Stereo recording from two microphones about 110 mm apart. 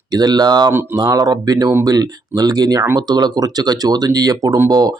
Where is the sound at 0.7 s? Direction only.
20° right (ahead or behind).